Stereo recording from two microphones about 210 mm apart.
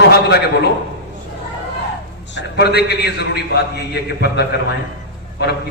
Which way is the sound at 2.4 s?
50° left (ahead or behind).